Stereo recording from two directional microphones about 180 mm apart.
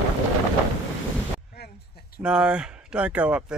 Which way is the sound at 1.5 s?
65° left (ahead or behind).